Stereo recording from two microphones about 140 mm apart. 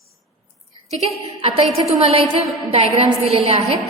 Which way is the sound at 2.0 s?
45° right (ahead or behind).